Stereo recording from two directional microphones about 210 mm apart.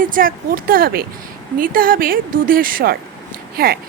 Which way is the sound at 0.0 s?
40° right (ahead or behind).